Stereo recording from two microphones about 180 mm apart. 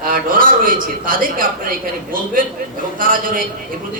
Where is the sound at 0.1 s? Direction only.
50° right (ahead or behind).